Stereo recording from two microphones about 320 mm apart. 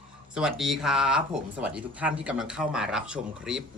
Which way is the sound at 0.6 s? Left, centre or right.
Centre.